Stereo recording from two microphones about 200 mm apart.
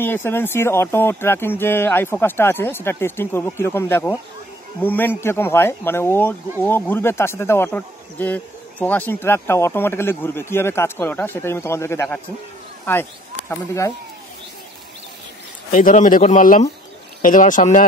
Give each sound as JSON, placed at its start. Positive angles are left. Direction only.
{"t": 0.0, "sound": "speech", "side_deg": 10}
{"t": 13.5, "sound": "speech", "side_deg": 15}
{"t": 15.7, "sound": "speech", "side_deg": 40}